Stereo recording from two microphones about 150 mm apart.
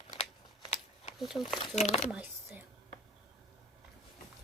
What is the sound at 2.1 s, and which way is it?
Speech, 10° right (ahead or behind).